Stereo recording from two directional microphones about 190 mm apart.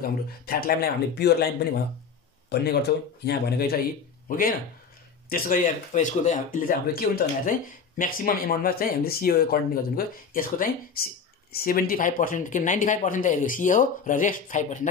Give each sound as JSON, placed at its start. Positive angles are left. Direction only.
{"t": 0.0, "sound": "speech", "side_deg": 50}
{"t": 3.3, "sound": "speech", "side_deg": 55}